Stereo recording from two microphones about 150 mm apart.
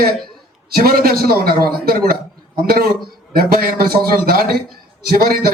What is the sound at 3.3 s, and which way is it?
Speech, 80° right.